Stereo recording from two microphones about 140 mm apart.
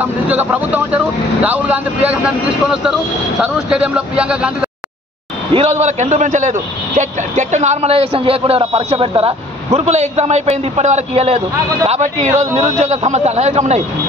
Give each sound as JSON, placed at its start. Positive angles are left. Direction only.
{"t": 0.0, "sound": "speech", "side_deg": -10}
{"t": 5.5, "sound": "a man's voice", "side_deg": -45}